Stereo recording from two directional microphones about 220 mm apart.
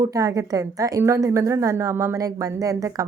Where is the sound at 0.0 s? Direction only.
15° right (ahead or behind).